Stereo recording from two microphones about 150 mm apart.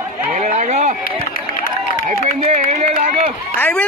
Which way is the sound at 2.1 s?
55° right (ahead or behind).